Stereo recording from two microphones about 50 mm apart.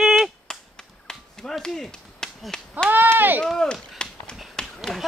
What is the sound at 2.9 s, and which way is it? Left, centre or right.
Speech, right.